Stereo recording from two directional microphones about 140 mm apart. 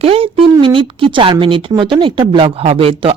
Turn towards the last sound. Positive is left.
turn(degrees=-40)  # may be behind; listen again after turning